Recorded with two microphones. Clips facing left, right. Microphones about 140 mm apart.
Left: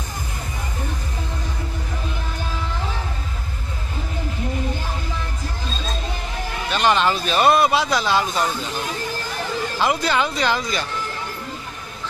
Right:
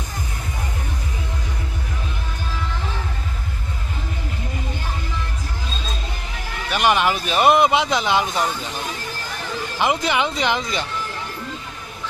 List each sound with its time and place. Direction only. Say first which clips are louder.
6.7 s speech: even; 15° right (ahead or behind)
9.8 s speech: right 1 dB; 15° right (ahead or behind)